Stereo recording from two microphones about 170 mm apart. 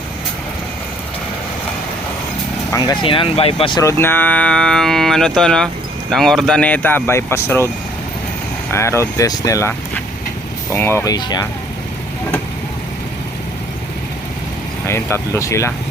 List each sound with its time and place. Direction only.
2.7 s speech: 25° left (ahead or behind)
3.8 s speech: 15° left (ahead or behind)
8.7 s speech: 15° left (ahead or behind)
14.8 s speech: 15° left (ahead or behind)